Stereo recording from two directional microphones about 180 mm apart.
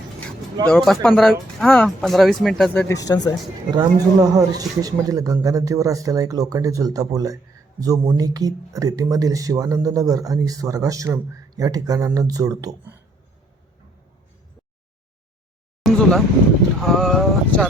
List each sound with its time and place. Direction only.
0.7 s speech: 5° left (ahead or behind)
2.8 s speech: 20° left (ahead or behind)
3.7 s speech: 20° right (ahead or behind)
15.8 s a sound: 5° left (ahead or behind)
16.8 s speech: centre (ahead or behind)